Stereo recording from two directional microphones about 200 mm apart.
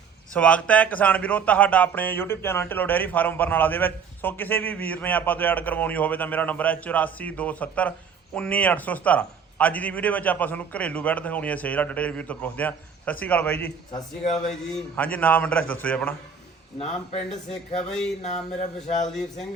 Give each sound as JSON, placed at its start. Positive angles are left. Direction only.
{"t": 0.3, "sound": "speech", "side_deg": 5}
{"t": 17.7, "sound": "speech", "side_deg": 35}
{"t": 19.0, "sound": "a man's voice", "side_deg": 0}